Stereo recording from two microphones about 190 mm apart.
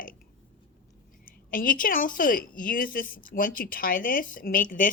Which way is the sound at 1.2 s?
45° left (ahead or behind).